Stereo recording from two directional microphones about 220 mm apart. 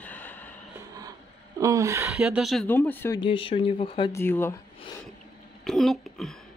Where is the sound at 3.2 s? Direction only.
25° left (ahead or behind).